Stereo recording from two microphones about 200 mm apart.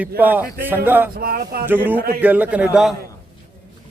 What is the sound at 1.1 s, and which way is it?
Speech, 50° right (ahead or behind).